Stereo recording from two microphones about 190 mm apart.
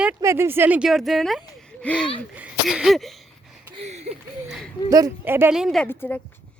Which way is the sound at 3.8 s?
35° right (ahead or behind).